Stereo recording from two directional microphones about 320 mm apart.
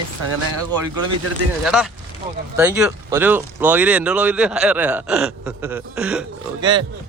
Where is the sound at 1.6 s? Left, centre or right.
Centre.